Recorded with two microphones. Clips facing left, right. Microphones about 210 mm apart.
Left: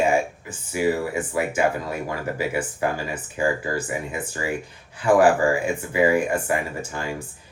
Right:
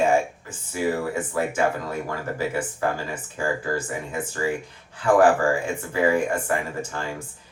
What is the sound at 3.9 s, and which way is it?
Speech, 15° left (ahead or behind).